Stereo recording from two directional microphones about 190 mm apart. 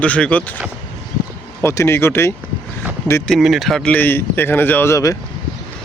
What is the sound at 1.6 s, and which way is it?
Speech, 15° left (ahead or behind).